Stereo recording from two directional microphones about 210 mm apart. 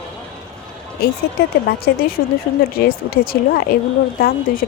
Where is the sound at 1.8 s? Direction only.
45° left (ahead or behind).